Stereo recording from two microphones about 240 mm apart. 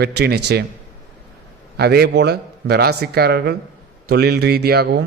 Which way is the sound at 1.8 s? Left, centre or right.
Right.